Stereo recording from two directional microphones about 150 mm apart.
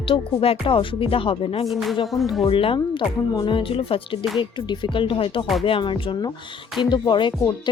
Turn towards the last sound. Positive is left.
turn(degrees=30)  # may be behind; listen again after turning